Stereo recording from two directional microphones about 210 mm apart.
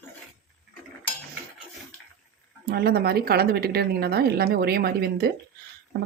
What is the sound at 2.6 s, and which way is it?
A woman's voice, 50° right (ahead or behind).